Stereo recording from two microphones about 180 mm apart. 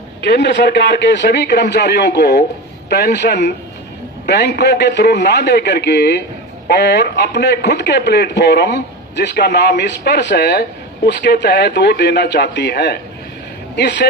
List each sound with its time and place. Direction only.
0.2 s a man's voice: 70° left (ahead or behind)